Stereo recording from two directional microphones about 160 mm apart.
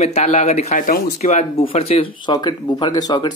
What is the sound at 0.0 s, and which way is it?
Speech, 45° left (ahead or behind).